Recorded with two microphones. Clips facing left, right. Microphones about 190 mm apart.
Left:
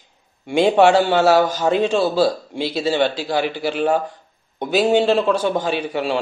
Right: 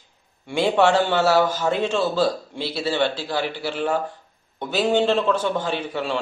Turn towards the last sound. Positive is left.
turn(degrees=15)  # may be behind; listen again after turning